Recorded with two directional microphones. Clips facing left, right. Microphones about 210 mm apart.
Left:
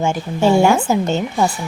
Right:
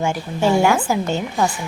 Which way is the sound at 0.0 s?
25° left (ahead or behind).